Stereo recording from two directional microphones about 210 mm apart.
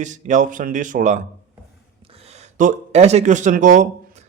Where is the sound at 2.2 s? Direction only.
30° right (ahead or behind).